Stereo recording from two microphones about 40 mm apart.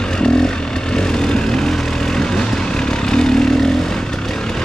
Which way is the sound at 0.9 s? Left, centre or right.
Centre.